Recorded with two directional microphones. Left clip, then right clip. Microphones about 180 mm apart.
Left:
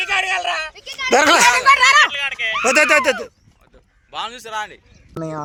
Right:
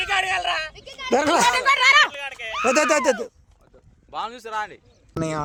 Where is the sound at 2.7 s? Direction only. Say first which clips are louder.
Left 5 dB; 25° right (ahead or behind).